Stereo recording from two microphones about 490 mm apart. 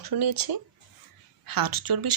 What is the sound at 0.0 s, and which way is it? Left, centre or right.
Speech, right.